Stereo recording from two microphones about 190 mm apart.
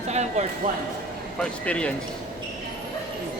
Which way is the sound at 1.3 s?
5° left (ahead or behind).